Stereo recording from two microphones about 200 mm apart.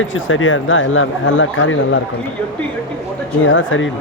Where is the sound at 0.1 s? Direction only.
80° left.